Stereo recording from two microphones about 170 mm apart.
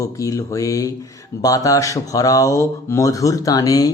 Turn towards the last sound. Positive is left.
turn(degrees=20)  # may be behind; listen again after turning